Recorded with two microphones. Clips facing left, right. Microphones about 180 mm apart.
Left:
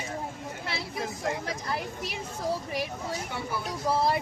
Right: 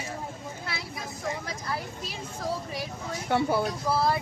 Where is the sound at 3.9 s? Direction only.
15° left (ahead or behind).